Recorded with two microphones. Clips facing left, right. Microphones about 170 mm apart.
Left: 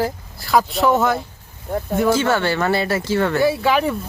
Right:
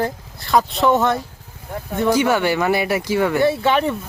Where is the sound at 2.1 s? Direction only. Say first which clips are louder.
Right 4 dB; 15° right (ahead or behind).